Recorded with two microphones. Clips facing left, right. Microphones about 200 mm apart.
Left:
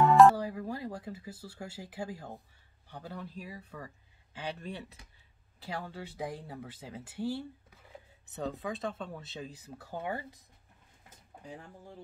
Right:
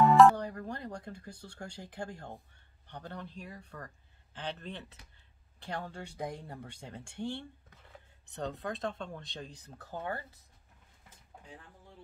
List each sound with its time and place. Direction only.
0.1 s speech: 5° left (ahead or behind)
11.5 s speech: 45° left (ahead or behind)